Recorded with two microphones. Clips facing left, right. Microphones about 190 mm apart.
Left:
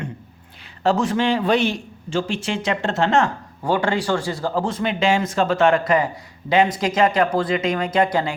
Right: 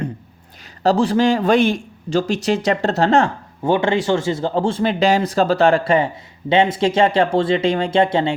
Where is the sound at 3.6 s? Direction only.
20° right (ahead or behind).